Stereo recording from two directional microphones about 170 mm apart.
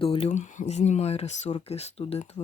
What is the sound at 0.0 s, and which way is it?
Speech, 35° left (ahead or behind).